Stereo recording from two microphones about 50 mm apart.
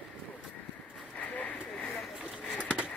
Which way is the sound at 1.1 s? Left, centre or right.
Left.